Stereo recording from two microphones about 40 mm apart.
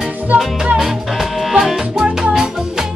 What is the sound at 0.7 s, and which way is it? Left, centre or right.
Music, centre.